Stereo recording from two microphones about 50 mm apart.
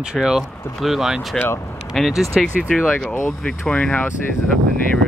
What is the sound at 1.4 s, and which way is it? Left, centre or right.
Speech, centre.